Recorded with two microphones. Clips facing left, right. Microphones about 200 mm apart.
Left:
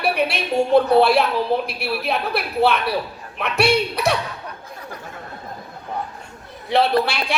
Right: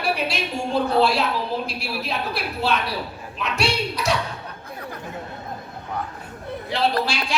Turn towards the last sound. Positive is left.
turn(degrees=60)  # may be behind; listen again after turning